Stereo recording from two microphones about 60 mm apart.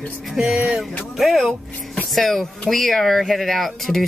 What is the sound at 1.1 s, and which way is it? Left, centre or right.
Speech, centre.